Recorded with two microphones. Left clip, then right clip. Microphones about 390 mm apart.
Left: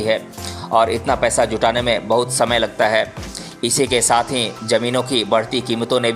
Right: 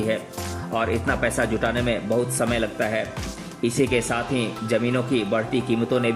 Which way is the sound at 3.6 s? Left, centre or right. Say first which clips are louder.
Left 4 dB; left.